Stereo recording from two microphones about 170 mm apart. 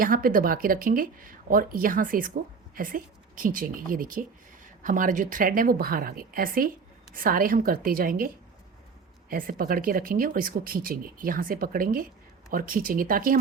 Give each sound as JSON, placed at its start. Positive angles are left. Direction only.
{"t": 0.0, "sound": "speech", "side_deg": -55}
{"t": 9.3, "sound": "speech", "side_deg": -55}